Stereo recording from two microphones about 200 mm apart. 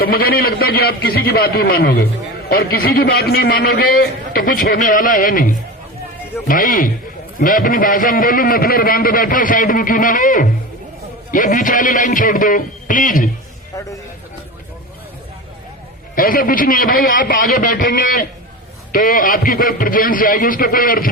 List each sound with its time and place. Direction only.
0.0 s a man's voice: 50° left (ahead or behind)
13.7 s a man's voice: 15° left (ahead or behind)
16.1 s a man's voice: 45° left (ahead or behind)